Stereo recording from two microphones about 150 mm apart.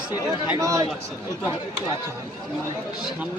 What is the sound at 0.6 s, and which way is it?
Speech, 20° right (ahead or behind).